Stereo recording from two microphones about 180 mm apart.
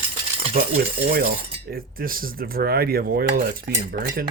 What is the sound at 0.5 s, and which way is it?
Cutlery, 60° right (ahead or behind).